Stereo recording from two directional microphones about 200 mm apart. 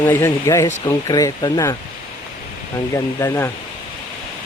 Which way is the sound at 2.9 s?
15° left (ahead or behind).